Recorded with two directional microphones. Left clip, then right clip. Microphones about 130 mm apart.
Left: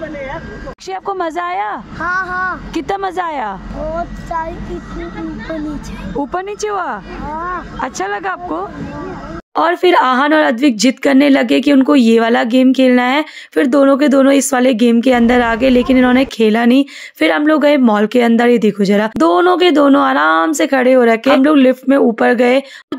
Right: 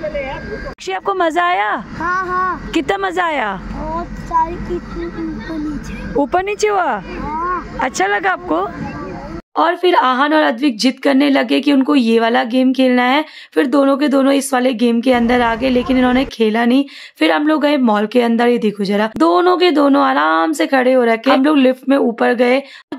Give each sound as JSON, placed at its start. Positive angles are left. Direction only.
{"t": 0.8, "sound": "speech", "side_deg": -10}
{"t": 2.0, "sound": "speech", "side_deg": 20}
{"t": 2.7, "sound": "speech", "side_deg": -10}
{"t": 6.1, "sound": "speech", "side_deg": -10}
{"t": 9.6, "sound": "speech", "side_deg": 30}